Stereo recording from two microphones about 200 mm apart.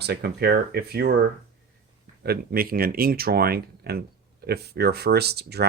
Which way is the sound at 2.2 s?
50° right (ahead or behind).